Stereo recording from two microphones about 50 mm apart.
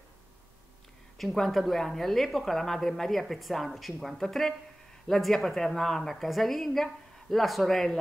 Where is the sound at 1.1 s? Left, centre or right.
Centre.